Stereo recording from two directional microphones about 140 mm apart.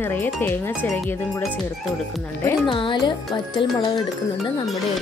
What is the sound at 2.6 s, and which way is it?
Music, 35° left (ahead or behind).